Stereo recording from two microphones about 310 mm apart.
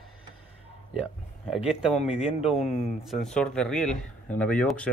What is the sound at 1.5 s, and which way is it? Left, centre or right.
Speech, centre.